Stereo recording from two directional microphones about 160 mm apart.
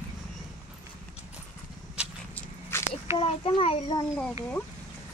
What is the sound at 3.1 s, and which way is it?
Speech, 35° left (ahead or behind).